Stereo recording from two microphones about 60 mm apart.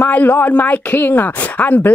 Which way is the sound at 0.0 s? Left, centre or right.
Left.